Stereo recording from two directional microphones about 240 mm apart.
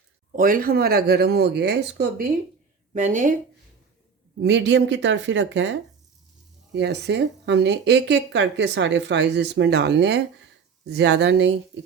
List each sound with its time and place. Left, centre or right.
0.3 s speech: right
2.9 s speech: right
4.4 s speech: right
6.7 s speech: right